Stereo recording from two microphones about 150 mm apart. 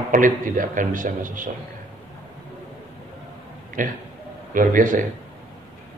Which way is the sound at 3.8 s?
60° right (ahead or behind).